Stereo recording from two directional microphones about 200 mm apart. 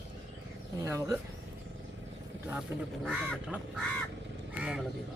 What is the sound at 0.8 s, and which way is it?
Speech, 15° right (ahead or behind).